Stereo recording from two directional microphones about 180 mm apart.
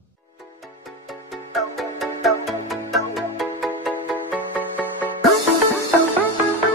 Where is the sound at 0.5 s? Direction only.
Centre (ahead or behind).